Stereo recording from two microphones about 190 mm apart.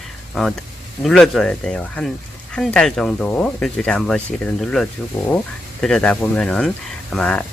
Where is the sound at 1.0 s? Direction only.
Centre (ahead or behind).